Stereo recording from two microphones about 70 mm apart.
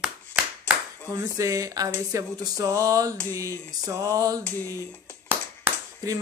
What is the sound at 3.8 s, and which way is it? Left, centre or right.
Music, right.